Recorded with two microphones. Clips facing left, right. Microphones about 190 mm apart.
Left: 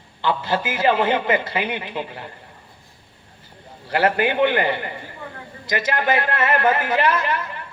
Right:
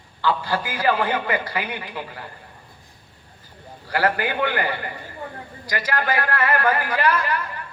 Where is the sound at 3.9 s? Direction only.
25° left (ahead or behind).